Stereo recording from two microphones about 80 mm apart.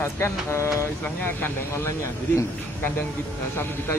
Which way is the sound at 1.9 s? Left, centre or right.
Left.